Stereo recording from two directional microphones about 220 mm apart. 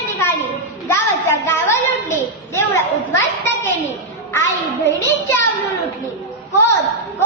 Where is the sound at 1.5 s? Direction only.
10° left (ahead or behind).